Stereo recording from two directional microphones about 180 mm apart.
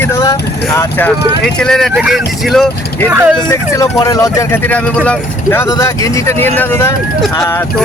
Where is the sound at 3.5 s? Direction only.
15° left (ahead or behind).